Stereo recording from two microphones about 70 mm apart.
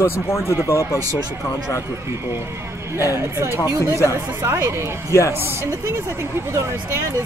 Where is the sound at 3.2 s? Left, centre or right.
Right.